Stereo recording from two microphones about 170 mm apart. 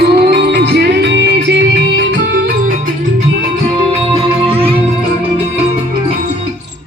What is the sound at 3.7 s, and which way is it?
Music, 30° right (ahead or behind).